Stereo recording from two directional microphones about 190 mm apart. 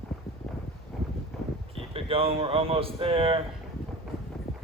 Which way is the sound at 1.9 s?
30° right (ahead or behind).